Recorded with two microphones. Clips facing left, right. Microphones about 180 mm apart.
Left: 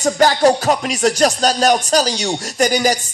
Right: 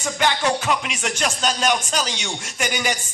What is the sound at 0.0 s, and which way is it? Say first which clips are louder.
Speech: left 9 dB; 40° left (ahead or behind).